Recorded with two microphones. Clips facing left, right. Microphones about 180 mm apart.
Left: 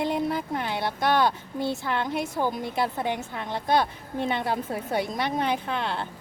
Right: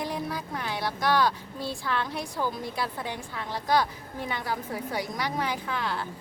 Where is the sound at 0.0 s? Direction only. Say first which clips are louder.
Left 6 dB; 25° left (ahead or behind).